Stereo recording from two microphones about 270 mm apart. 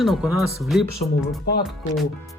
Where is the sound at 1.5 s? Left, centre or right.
Left.